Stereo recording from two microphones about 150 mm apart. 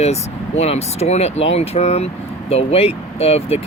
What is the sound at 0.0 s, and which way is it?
Speech, 45° left (ahead or behind).